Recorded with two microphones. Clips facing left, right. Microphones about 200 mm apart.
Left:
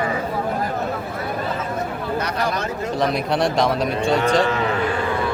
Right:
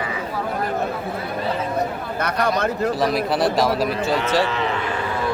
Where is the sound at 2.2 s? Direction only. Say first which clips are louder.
Right 2 dB; 55° right (ahead or behind).